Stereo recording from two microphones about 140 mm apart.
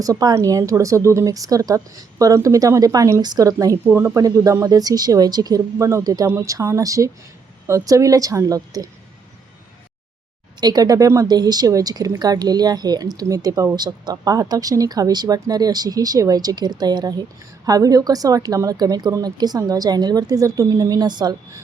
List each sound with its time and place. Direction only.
0.0 s speech: 25° right (ahead or behind)
10.6 s speech: 30° right (ahead or behind)